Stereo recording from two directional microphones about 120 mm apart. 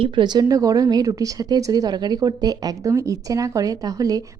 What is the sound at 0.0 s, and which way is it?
A woman's voice, 40° right (ahead or behind).